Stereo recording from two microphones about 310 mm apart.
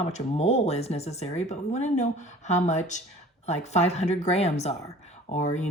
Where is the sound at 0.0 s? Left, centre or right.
Left.